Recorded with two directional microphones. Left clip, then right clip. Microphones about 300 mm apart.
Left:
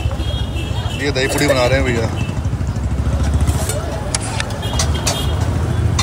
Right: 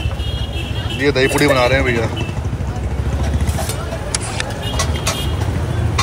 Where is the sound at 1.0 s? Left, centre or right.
Centre.